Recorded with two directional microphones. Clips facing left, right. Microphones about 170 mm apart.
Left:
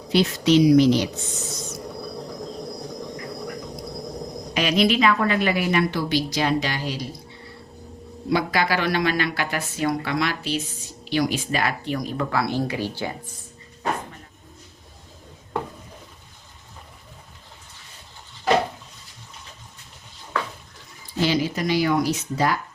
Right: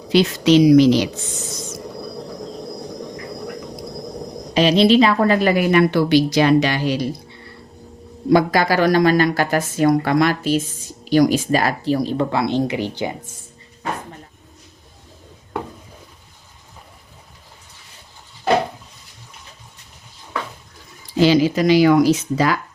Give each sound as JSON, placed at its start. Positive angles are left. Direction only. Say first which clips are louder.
{"t": 0.1, "sound": "speech", "louder": "right 4 dB", "side_deg": -90}
{"t": 4.5, "sound": "speech", "louder": "right 7 dB", "side_deg": -30}
{"t": 5.7, "sound": "a woman's voice", "louder": "right 8 dB", "side_deg": -65}
{"t": 8.3, "sound": "speech", "louder": "right 7 dB", "side_deg": -45}
{"t": 21.2, "sound": "speech", "louder": "right 8 dB", "side_deg": -90}